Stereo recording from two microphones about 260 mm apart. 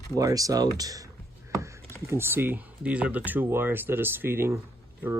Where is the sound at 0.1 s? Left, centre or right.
Centre.